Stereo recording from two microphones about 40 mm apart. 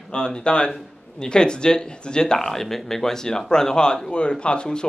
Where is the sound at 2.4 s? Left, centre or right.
Centre.